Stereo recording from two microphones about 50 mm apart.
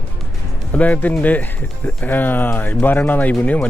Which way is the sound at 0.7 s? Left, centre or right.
Left.